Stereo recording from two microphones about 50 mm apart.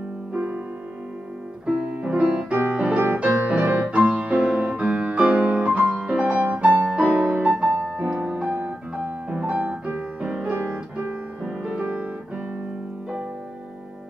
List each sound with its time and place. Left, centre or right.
0.3 s music: right
1.7 s music: right
2.7 s piano: right
3.9 s music: right
8.5 s piano: right
8.9 s music: right
10.5 s music: right